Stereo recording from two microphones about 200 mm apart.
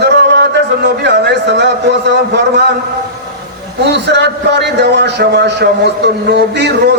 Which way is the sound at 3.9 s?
60° right (ahead or behind).